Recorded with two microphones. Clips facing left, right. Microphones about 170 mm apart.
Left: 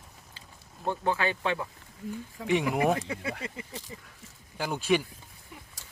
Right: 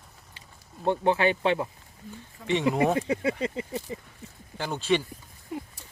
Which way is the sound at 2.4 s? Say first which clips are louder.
Even; 90° left.